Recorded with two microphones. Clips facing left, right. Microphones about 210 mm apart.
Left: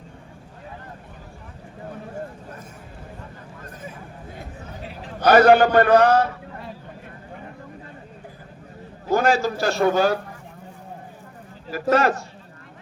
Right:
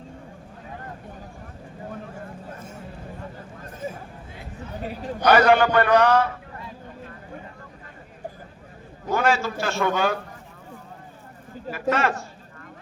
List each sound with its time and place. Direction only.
4.8 s chatter: 45° right (ahead or behind)
5.2 s a man's voice: 40° left (ahead or behind)
9.1 s a man's voice: 35° left (ahead or behind)
11.7 s a man's voice: 40° left (ahead or behind)